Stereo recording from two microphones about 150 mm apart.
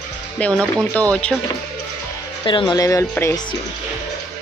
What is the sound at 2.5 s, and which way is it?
Speech, 30° left (ahead or behind).